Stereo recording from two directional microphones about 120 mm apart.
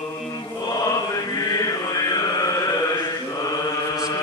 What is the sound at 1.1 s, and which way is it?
Chant, 30° left (ahead or behind).